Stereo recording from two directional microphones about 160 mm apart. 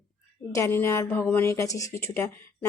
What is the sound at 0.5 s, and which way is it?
A woman's voice, 15° left (ahead or behind).